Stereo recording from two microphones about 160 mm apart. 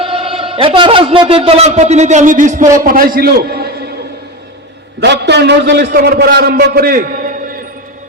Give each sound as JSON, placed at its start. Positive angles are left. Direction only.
{"t": 0.0, "sound": "a man's voice", "side_deg": -35}
{"t": 4.9, "sound": "a man's voice", "side_deg": -90}